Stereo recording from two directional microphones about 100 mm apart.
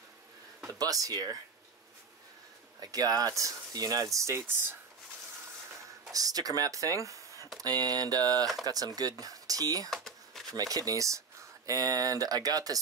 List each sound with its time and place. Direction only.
0.7 s speech: 35° right (ahead or behind)
2.8 s speech: 40° right (ahead or behind); by 4.7 s 20° right (ahead or behind)
6.1 s speech: 40° right (ahead or behind)
9.8 s a sound: centre (ahead or behind)
10.5 s speech: 35° right (ahead or behind)